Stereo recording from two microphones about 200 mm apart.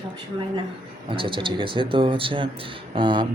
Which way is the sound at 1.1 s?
25° right (ahead or behind).